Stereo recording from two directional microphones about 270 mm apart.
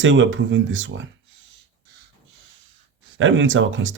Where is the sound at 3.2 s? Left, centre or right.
Right.